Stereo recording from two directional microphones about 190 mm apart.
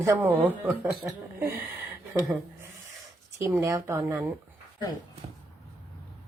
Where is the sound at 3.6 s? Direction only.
15° right (ahead or behind).